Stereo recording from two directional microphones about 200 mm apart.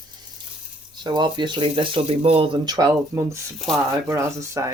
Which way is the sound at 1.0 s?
20° right (ahead or behind).